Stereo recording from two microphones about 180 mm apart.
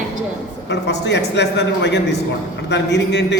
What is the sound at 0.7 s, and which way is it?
A man's voice, 75° left (ahead or behind).